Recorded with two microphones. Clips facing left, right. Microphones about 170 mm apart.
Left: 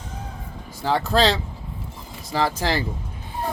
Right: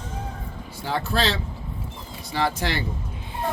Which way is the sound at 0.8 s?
90° left.